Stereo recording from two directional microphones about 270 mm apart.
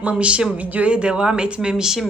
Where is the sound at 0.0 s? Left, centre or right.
Centre.